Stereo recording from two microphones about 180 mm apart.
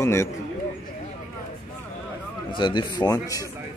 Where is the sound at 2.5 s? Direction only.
25° left (ahead or behind).